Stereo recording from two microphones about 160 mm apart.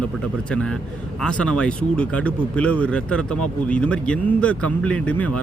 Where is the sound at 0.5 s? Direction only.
5° left (ahead or behind).